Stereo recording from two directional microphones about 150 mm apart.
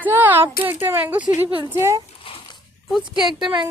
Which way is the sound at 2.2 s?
35° left (ahead or behind).